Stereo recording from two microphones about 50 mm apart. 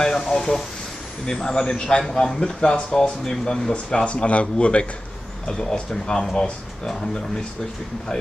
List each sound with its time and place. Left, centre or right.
0.0 s a sound: centre
1.2 s speech: centre
3.7 s speech: left